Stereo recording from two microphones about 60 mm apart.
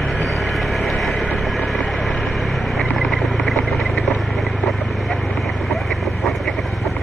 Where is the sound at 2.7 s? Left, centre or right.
Centre.